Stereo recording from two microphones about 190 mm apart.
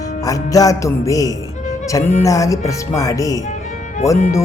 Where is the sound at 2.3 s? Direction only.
15° left (ahead or behind).